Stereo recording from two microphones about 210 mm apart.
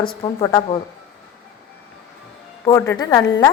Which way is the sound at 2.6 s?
10° left (ahead or behind).